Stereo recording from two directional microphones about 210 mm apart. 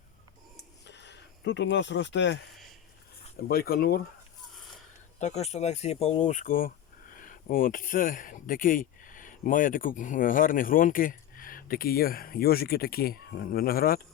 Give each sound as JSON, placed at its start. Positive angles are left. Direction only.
{"t": 0.9, "sound": "a sound", "side_deg": 55}
{"t": 3.5, "sound": "speech", "side_deg": 45}
{"t": 5.2, "sound": "speech", "side_deg": 30}